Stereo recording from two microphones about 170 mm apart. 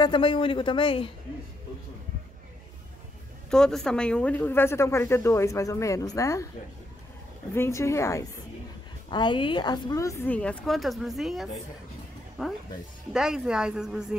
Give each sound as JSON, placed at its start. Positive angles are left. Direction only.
{"t": 0.0, "sound": "a woman's voice", "side_deg": 30}
{"t": 3.4, "sound": "speech", "side_deg": 5}
{"t": 7.5, "sound": "speech", "side_deg": 15}
{"t": 9.1, "sound": "a woman's voice", "side_deg": 25}